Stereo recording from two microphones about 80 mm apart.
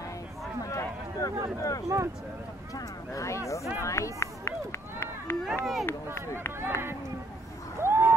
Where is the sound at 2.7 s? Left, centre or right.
Left.